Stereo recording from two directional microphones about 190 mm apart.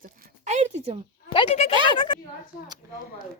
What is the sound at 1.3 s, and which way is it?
Speech, 30° left (ahead or behind).